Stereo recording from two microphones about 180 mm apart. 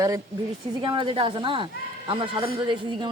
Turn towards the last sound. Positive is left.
turn(degrees=-25)  # may be behind; listen again after turning